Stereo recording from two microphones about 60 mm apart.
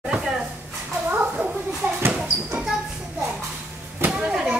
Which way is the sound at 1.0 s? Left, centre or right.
Right.